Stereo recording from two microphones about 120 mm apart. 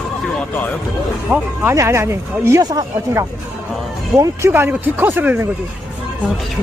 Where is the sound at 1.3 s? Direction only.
20° right (ahead or behind).